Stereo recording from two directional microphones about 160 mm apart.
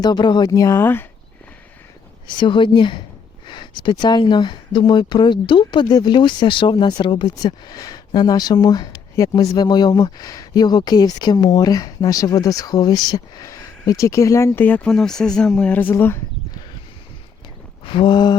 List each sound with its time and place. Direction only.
0.0 s speech: 25° left (ahead or behind)
2.4 s a woman's voice: 30° left (ahead or behind); by 16.2 s 15° left (ahead or behind)
17.8 s speech: 30° left (ahead or behind)